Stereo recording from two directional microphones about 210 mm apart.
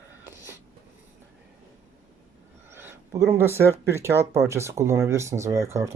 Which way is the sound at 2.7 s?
10° right (ahead or behind).